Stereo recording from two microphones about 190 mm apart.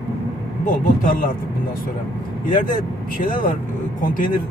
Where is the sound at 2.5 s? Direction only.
45° left (ahead or behind).